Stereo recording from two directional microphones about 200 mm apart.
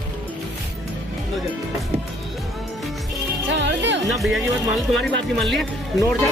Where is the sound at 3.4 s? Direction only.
65° right (ahead or behind).